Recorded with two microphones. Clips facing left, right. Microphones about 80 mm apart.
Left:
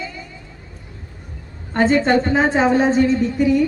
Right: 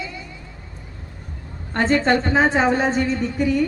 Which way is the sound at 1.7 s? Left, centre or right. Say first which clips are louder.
Left 3 dB; centre.